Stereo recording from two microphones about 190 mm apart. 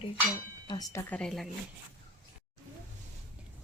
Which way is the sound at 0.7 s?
20° left (ahead or behind).